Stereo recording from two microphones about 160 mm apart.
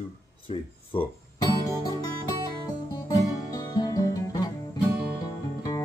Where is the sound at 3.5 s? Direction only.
20° left (ahead or behind).